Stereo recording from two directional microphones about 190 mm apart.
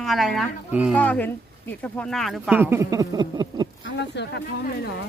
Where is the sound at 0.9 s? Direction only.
10° left (ahead or behind).